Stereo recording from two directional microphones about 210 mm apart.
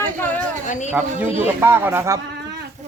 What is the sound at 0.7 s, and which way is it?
Speech, 35° left (ahead or behind).